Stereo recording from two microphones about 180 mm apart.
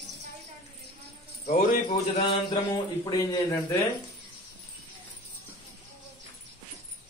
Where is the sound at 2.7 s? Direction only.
20° left (ahead or behind).